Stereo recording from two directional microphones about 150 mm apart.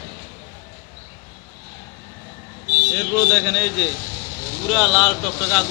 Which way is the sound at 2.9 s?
5° left (ahead or behind).